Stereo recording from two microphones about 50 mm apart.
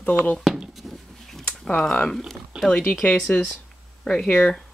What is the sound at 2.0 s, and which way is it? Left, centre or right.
Speech, centre.